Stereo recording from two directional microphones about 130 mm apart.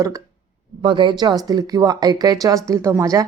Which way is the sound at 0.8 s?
40° right (ahead or behind).